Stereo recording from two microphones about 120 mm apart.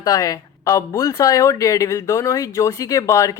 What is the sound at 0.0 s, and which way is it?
Speech, 30° left (ahead or behind).